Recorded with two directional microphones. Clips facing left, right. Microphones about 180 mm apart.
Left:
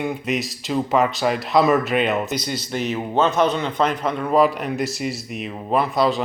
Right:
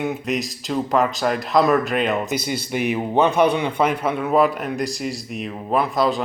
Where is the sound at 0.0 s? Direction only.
Centre (ahead or behind).